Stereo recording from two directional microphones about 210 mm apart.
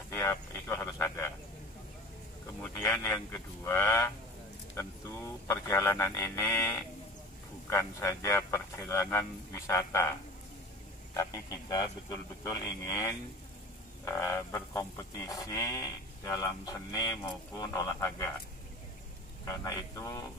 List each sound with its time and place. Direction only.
0.1 s speech: 15° left (ahead or behind)
2.6 s speech: 15° left (ahead or behind)
5.5 s speech: 10° left (ahead or behind)
11.1 s speech: 15° left (ahead or behind)
19.4 s speech: 15° left (ahead or behind)